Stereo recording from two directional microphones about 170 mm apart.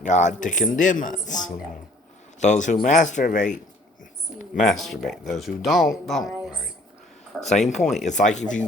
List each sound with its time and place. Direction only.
0.0 s a man's voice: 45° left (ahead or behind)
4.8 s speech: centre (ahead or behind)
7.3 s speech: centre (ahead or behind)
8.0 s a man's voice: 45° left (ahead or behind)